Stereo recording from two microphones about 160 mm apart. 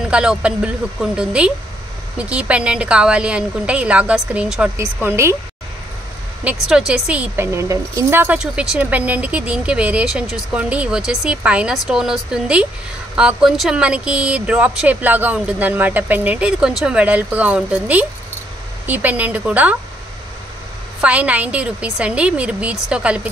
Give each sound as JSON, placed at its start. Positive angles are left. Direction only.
{"t": 0.1, "sound": "speech", "side_deg": -5}
{"t": 6.5, "sound": "speech", "side_deg": -10}
{"t": 21.0, "sound": "speech", "side_deg": -10}